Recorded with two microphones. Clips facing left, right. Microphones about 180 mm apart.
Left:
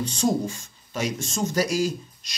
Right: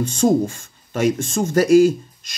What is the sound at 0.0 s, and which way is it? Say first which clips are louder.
Speech: right 7 dB; 50° right (ahead or behind).